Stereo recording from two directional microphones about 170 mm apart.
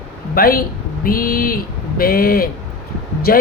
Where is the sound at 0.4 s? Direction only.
60° left (ahead or behind).